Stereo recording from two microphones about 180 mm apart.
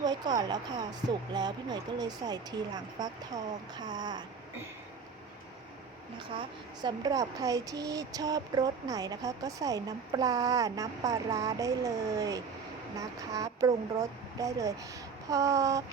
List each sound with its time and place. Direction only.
0.0 s speech: 20° right (ahead or behind)
6.4 s speech: 20° right (ahead or behind)
15.3 s a sound: 20° right (ahead or behind)